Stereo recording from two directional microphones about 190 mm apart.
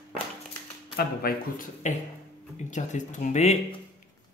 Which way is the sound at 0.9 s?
50° left (ahead or behind).